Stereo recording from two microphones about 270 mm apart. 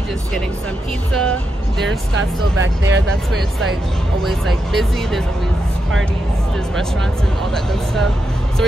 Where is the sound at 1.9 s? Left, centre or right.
Right.